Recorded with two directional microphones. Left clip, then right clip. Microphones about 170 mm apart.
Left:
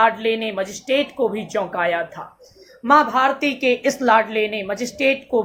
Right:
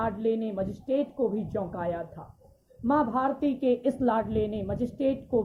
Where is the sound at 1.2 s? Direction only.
30° left (ahead or behind).